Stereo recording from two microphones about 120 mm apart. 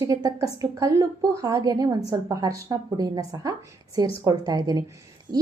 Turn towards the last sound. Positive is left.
turn(degrees=-35)  # may be behind; listen again after turning